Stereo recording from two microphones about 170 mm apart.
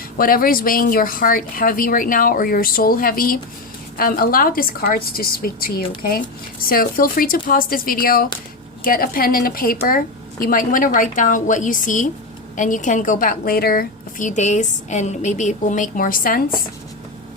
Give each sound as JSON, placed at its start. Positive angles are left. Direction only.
{"t": 0.2, "sound": "a woman's voice", "side_deg": 55}